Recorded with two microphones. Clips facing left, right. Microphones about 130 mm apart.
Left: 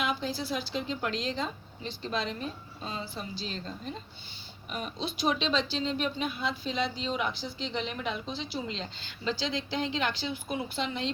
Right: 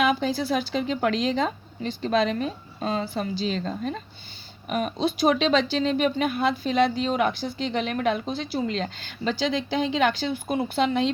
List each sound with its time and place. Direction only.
0.0 s a woman's voice: 75° right (ahead or behind)
4.7 s speech: 65° right (ahead or behind)